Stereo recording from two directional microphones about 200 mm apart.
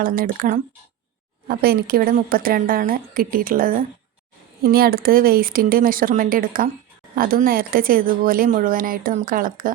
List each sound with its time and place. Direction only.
0.0 s speech: 45° right (ahead or behind)